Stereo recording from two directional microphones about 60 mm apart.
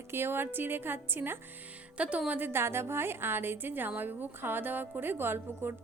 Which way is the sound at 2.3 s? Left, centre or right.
Right.